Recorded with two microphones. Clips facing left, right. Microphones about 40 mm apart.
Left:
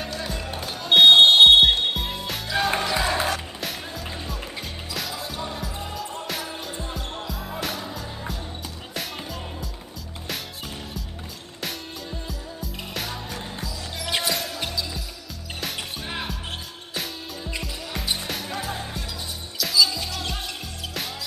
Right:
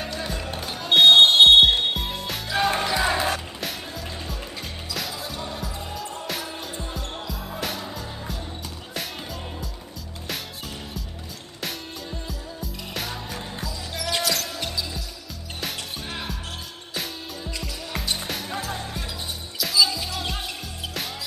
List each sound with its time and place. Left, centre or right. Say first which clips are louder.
0.0 s music: even; centre
11.6 s music: even; centre
13.9 s basketball bounce: right 1 dB; centre
18.0 s music: left 1 dB; centre
19.6 s music: even; centre